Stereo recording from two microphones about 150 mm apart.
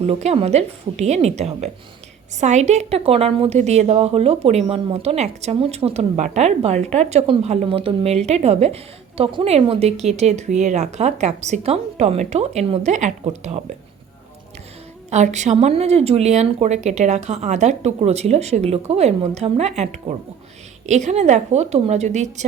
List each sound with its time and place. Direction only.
0.0 s a woman's voice: 45° right (ahead or behind)
15.1 s a woman's voice: 50° right (ahead or behind)